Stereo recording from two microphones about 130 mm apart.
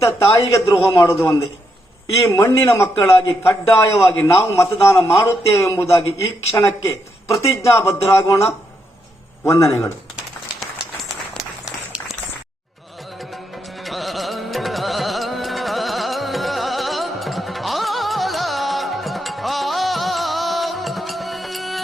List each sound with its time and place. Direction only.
0.0 s a man's voice: 25° left (ahead or behind)
11.6 s a sound: 5° right (ahead or behind)
13.8 s music: centre (ahead or behind)